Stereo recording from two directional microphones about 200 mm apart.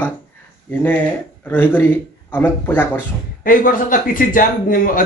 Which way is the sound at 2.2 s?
10° left (ahead or behind).